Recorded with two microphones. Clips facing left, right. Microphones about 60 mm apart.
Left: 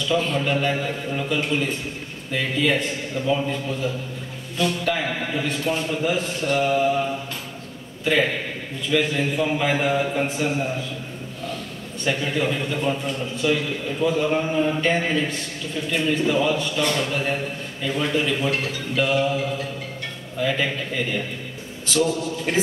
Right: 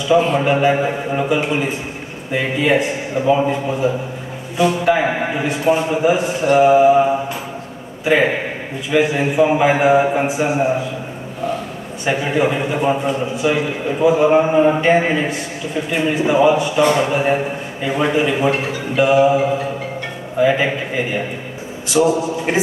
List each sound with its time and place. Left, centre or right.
0.0 s a man's voice: centre
3.3 s a man's voice: right
10.2 s a man's voice: centre